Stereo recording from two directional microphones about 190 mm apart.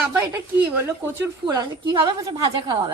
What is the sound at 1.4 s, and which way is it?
A woman's voice, 20° right (ahead or behind).